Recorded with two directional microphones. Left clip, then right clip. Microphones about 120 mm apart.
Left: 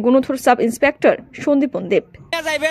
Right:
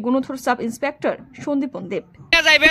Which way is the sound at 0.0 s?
25° left (ahead or behind).